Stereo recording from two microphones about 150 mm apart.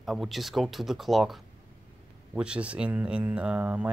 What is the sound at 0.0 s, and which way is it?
Speech, centre (ahead or behind).